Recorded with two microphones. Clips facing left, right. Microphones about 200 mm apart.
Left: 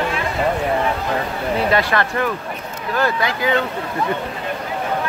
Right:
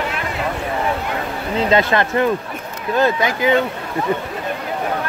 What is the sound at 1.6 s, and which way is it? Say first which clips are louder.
Speech: right 3 dB; 20° right (ahead or behind).